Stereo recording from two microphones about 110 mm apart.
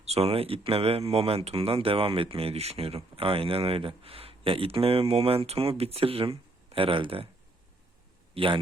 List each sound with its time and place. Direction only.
0.0 s speech: 70° right (ahead or behind)
8.4 s speech: 60° right (ahead or behind)